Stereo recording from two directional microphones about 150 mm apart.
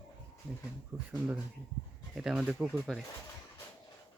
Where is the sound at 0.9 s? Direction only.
20° right (ahead or behind).